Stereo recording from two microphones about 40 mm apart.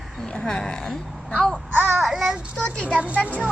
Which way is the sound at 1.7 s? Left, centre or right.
Right.